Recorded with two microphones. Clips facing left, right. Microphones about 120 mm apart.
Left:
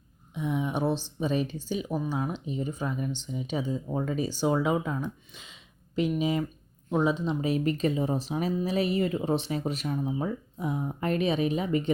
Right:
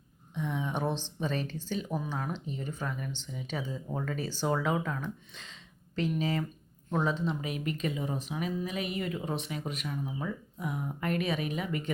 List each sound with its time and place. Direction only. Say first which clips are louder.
0.3 s speech: left 4 dB; 15° left (ahead or behind)
7.4 s speech: left 7 dB; 35° left (ahead or behind)